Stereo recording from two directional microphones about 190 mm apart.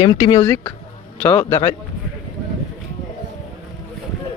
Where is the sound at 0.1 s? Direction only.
20° left (ahead or behind).